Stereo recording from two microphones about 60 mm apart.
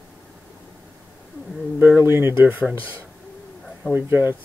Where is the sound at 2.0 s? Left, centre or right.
Right.